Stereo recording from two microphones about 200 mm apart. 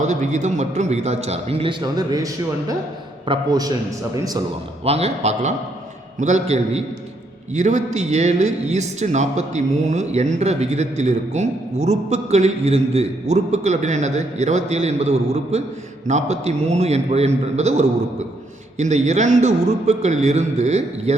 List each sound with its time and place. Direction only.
0.0 s a man's voice: 35° right (ahead or behind); by 4.4 s 20° right (ahead or behind)
4.8 s a man's voice: 30° right (ahead or behind)